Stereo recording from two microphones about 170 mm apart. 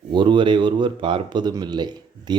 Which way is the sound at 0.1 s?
30° right (ahead or behind).